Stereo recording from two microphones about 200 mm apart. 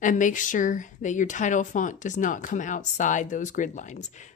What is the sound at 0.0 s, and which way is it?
A woman's voice, 40° left (ahead or behind).